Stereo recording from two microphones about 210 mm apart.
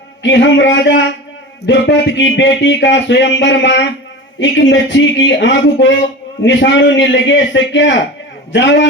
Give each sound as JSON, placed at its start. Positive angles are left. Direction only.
{"t": 0.2, "sound": "speech", "side_deg": 60}